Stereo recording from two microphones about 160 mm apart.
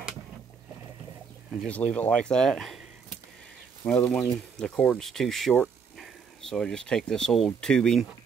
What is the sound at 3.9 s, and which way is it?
Speech, 10° left (ahead or behind).